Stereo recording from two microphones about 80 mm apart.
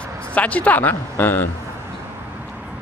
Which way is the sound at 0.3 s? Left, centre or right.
Centre.